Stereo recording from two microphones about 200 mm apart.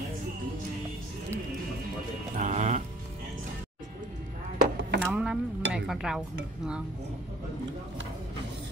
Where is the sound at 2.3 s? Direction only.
35° right (ahead or behind).